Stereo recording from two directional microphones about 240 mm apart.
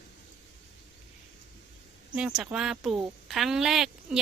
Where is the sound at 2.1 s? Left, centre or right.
Centre.